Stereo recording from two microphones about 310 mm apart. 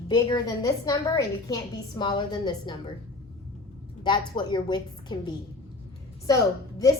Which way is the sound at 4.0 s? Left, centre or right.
Centre.